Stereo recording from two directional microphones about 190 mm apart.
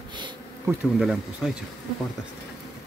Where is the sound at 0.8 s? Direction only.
Centre (ahead or behind).